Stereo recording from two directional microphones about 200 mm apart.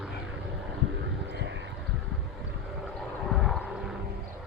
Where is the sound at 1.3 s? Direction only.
60° right (ahead or behind).